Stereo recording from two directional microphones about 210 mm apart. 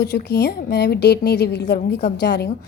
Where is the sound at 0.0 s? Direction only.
50° left (ahead or behind).